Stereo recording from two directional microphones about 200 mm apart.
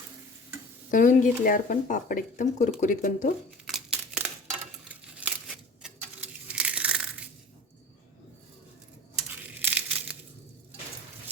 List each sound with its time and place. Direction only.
0.9 s speech: 40° left (ahead or behind)
3.7 s crumpling: 5° right (ahead or behind)
5.2 s a sound: 5° right (ahead or behind)
9.3 s crumpling: 10° right (ahead or behind)